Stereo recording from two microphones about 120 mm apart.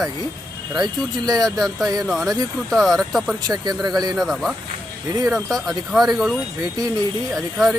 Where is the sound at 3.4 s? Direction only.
35° right (ahead or behind).